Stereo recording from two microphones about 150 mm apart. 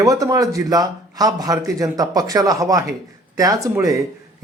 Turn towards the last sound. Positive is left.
turn(degrees=-20)  # may be behind; listen again after turning